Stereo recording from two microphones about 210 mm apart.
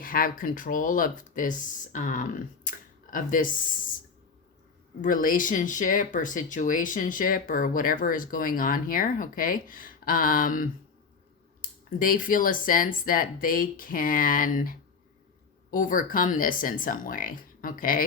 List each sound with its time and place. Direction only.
0.0 s speech: 40° left (ahead or behind)
5.0 s speech: 40° left (ahead or behind)
11.9 s speech: 40° left (ahead or behind)